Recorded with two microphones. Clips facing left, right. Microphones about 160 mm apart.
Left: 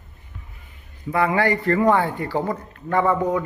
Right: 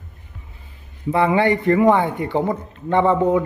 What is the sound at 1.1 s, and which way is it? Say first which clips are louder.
Speech: right 3 dB; 25° right (ahead or behind).